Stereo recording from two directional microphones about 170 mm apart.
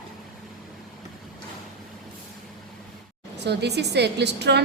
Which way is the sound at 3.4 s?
75° right (ahead or behind).